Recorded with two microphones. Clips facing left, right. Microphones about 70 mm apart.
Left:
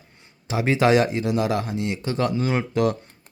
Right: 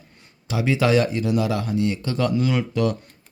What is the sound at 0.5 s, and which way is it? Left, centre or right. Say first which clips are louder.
Speech: left 1 dB; left.